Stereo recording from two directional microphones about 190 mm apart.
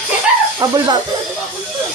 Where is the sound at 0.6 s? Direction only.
20° right (ahead or behind).